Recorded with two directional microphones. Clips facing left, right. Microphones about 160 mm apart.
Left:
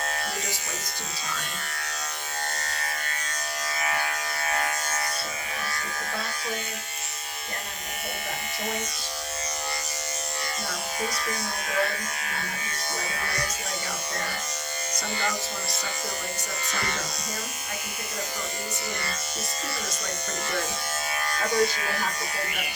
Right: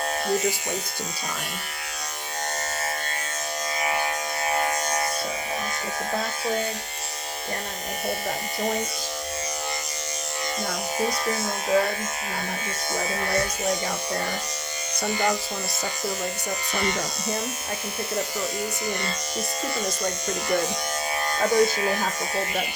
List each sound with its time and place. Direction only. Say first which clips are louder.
2.6 s electric shaver: right 5 dB; 20° right (ahead or behind)
3.8 s a sound: right 3 dB; 20° right (ahead or behind)
11.0 s speech: right 6 dB; 30° right (ahead or behind)
13.0 s speech: right 8 dB; 25° right (ahead or behind)
16.7 s speech: right 6 dB; 20° right (ahead or behind)
21.3 s speech: right 4 dB; 25° right (ahead or behind)